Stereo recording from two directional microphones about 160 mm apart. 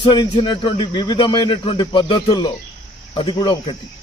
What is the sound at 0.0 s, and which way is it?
Speech, 30° left (ahead or behind).